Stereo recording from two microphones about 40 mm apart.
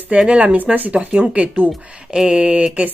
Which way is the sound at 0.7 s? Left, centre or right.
Right.